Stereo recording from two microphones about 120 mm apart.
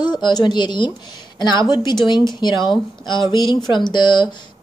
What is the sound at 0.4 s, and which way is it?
Speech, 40° left (ahead or behind).